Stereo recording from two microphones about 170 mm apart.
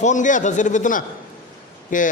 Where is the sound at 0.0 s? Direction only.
45° left (ahead or behind).